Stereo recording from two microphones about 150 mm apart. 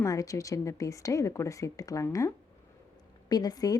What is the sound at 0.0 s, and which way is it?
A woman's voice, 20° left (ahead or behind).